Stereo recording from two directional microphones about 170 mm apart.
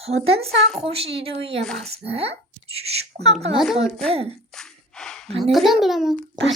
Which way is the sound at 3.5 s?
Centre (ahead or behind).